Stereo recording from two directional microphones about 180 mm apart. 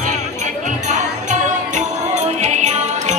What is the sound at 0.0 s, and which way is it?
Music, 45° right (ahead or behind).